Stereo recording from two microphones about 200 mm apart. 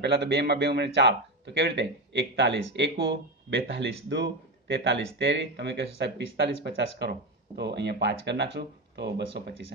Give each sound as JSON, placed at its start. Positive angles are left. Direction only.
{"t": 0.0, "sound": "speech", "side_deg": -55}